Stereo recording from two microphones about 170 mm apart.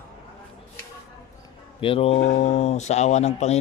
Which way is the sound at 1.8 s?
35° left (ahead or behind).